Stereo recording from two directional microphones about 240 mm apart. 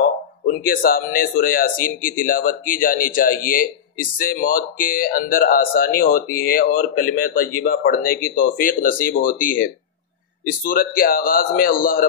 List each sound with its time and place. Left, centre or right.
0.0 s speech: left